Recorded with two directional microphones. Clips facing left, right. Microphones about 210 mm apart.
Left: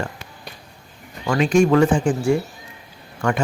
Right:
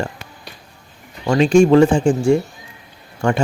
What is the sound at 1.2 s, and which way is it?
Speech, 25° right (ahead or behind).